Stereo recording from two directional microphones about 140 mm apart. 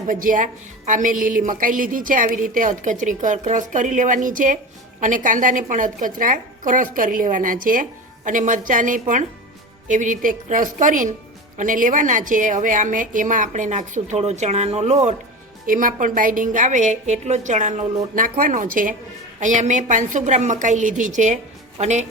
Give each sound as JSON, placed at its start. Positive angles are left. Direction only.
{"t": 0.1, "sound": "a woman's voice", "side_deg": -75}
{"t": 15.6, "sound": "a woman's voice", "side_deg": -75}
{"t": 18.1, "sound": "a woman's voice", "side_deg": -75}
{"t": 19.4, "sound": "a woman's voice", "side_deg": -60}